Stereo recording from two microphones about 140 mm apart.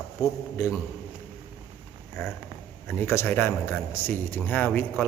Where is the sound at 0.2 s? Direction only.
25° left (ahead or behind).